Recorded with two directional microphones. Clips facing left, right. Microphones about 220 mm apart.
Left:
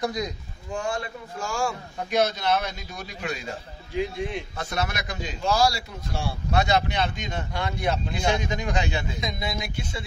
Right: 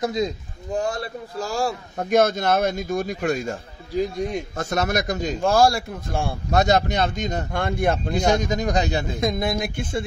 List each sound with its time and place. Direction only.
0.0 s speech: 25° right (ahead or behind)
0.7 s a man's voice: 40° right (ahead or behind)